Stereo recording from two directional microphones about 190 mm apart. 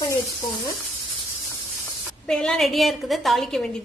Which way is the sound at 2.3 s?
5° left (ahead or behind).